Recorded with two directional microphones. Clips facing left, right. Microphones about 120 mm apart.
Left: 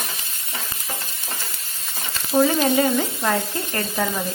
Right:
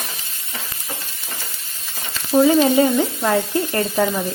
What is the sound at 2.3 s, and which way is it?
Speech, 15° right (ahead or behind).